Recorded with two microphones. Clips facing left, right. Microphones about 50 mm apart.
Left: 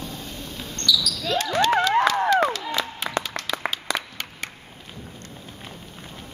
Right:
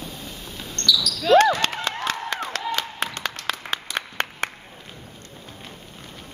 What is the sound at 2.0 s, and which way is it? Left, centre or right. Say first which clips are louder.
Clapping: left 8 dB; right.